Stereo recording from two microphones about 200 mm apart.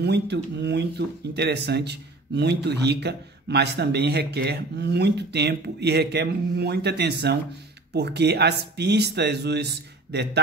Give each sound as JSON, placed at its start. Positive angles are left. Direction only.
{"t": 0.0, "sound": "speech", "side_deg": -55}